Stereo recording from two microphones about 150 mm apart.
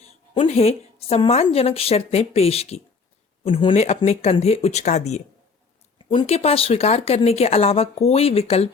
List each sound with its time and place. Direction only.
0.4 s speech: 45° left (ahead or behind)
3.8 s speech: 45° left (ahead or behind)